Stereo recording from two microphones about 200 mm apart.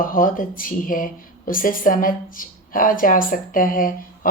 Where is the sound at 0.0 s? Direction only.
45° left (ahead or behind).